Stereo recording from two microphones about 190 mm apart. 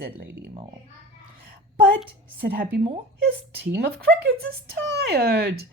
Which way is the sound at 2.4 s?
55° right (ahead or behind).